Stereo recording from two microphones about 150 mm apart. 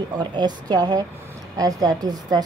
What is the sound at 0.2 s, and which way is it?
Speech, 30° right (ahead or behind).